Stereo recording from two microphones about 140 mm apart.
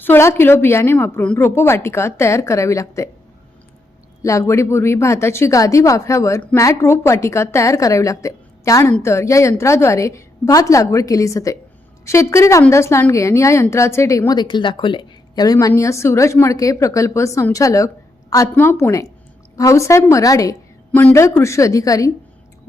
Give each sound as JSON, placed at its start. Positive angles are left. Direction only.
{"t": 0.0, "sound": "a woman's voice", "side_deg": 15}
{"t": 4.2, "sound": "a woman's voice", "side_deg": 20}
{"t": 15.5, "sound": "a woman's voice", "side_deg": 20}